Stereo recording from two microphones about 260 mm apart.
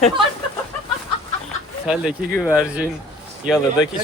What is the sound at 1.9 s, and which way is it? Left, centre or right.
Speech, centre.